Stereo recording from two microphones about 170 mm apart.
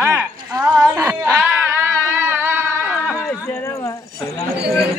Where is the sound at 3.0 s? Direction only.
15° left (ahead or behind).